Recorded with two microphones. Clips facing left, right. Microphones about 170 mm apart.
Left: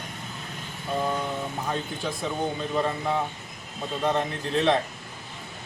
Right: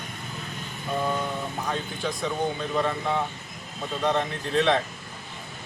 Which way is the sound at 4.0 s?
5° left (ahead or behind).